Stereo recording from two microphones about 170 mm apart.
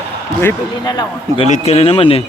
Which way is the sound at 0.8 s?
25° left (ahead or behind).